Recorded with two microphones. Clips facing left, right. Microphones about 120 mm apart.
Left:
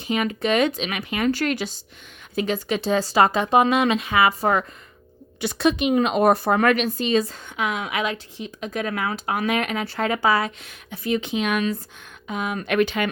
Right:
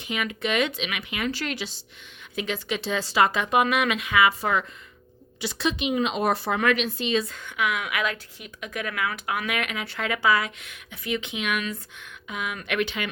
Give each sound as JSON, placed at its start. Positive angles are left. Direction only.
{"t": 0.1, "sound": "speech", "side_deg": 35}
{"t": 5.4, "sound": "speech", "side_deg": 50}